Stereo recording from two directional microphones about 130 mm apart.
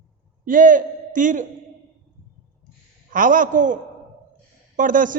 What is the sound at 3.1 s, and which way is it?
Speech, 90° right.